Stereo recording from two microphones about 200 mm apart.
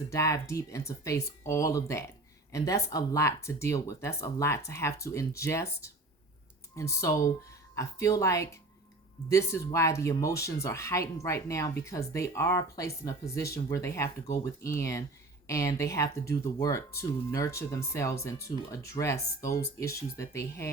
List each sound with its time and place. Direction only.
0.1 s speech: 15° left (ahead or behind)